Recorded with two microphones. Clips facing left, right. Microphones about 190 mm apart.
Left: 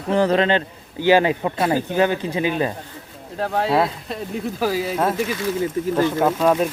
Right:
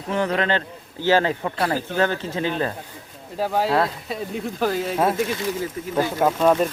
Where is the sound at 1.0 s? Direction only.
15° left (ahead or behind).